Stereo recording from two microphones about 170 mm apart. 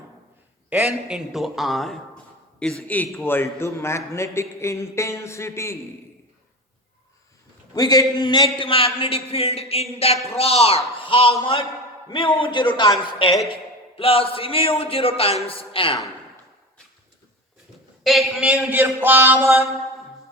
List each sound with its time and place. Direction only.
0.7 s a man's voice: 5° right (ahead or behind); by 5.7 s 15° left (ahead or behind)
7.7 s a man's voice: 20° left (ahead or behind)
18.0 s a man's voice: centre (ahead or behind)